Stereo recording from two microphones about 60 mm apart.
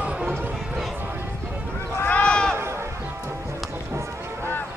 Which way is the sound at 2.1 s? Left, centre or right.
Left.